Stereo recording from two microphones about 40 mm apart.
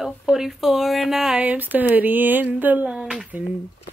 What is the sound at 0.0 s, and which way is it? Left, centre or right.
Speech, centre.